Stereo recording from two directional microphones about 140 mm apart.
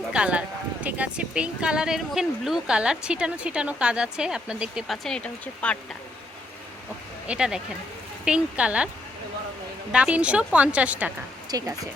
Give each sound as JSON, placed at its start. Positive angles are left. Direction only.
{"t": 0.1, "sound": "speech", "side_deg": -10}
{"t": 7.3, "sound": "speech", "side_deg": -5}
{"t": 9.9, "sound": "speech", "side_deg": -5}
{"t": 11.5, "sound": "speech", "side_deg": -25}